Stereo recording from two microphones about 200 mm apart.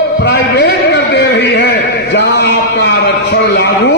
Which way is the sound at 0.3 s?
55° left (ahead or behind).